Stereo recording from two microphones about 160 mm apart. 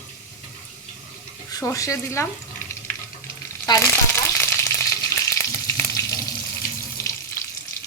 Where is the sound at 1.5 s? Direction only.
20° left (ahead or behind).